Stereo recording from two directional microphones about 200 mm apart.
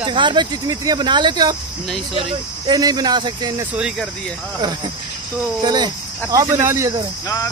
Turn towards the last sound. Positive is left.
turn(degrees=-15)  # may be behind; listen again after turning